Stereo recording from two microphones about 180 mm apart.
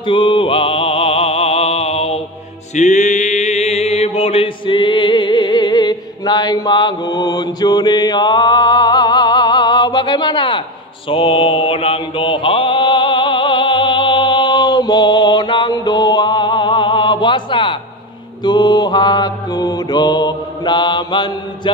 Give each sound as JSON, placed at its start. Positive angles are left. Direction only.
{"t": 0.0, "sound": "music", "side_deg": 30}
{"t": 2.7, "sound": "mantra", "side_deg": 40}